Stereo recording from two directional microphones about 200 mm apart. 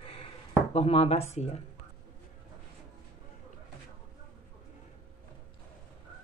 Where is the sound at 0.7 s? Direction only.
30° left (ahead or behind).